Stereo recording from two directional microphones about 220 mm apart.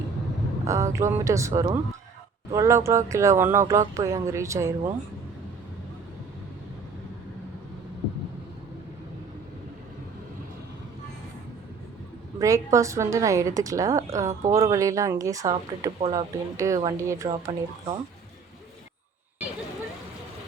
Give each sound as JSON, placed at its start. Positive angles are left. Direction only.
{"t": 0.6, "sound": "a woman's voice", "side_deg": -15}
{"t": 12.4, "sound": "a woman's voice", "side_deg": -15}
{"t": 16.0, "sound": "speech", "side_deg": -25}
{"t": 16.6, "sound": "a woman's voice", "side_deg": -15}
{"t": 17.2, "sound": "speech", "side_deg": -25}